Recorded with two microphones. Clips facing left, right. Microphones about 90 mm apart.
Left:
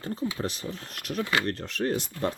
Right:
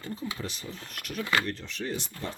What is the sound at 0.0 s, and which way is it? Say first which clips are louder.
Speech: left 5 dB; 40° left (ahead or behind).